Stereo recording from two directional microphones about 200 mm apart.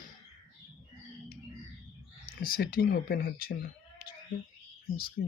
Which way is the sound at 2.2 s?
45° left (ahead or behind).